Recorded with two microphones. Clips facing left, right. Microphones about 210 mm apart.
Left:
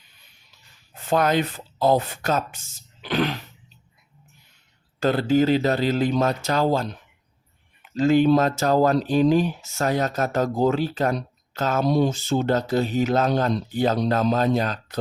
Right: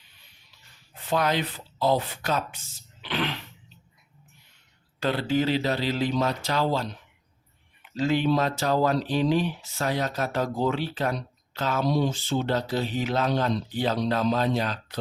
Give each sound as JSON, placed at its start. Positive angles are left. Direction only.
{"t": 0.9, "sound": "speech", "side_deg": 45}
{"t": 4.9, "sound": "speech", "side_deg": 45}